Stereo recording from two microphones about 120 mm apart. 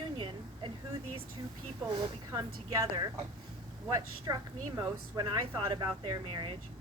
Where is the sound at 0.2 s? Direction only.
45° right (ahead or behind).